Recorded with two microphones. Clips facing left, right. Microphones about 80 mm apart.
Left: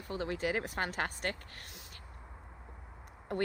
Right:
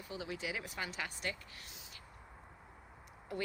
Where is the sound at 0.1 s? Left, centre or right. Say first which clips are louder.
Left 8 dB; left.